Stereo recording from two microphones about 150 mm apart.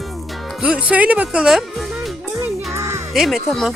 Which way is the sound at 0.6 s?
5° right (ahead or behind).